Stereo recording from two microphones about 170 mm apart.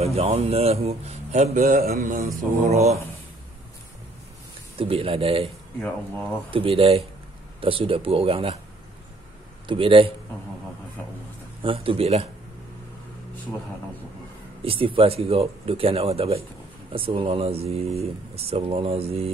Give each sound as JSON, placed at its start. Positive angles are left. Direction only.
{"t": 0.0, "sound": "speech", "side_deg": -35}
{"t": 2.7, "sound": "speech", "side_deg": -40}
{"t": 4.7, "sound": "speech", "side_deg": -35}
{"t": 5.8, "sound": "speech", "side_deg": 5}
{"t": 6.5, "sound": "speech", "side_deg": -30}
{"t": 9.7, "sound": "speech", "side_deg": -30}
{"t": 11.6, "sound": "speech", "side_deg": -30}
{"t": 14.6, "sound": "speech", "side_deg": -35}